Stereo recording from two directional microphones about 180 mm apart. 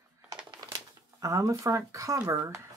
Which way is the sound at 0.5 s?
20° right (ahead or behind).